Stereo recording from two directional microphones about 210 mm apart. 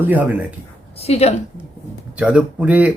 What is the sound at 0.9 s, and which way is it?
Speech, 30° left (ahead or behind).